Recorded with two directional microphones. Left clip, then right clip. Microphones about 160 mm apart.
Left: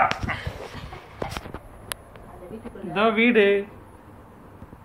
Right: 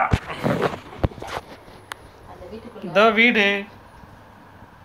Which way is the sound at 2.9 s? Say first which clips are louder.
Right 4 dB; 75° right (ahead or behind).